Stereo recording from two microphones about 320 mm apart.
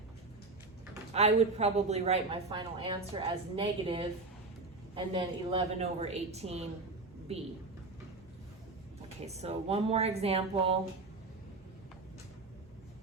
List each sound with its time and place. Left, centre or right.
1.1 s speech: centre
9.2 s speech: centre